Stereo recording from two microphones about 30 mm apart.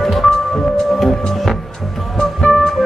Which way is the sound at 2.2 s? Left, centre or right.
Left.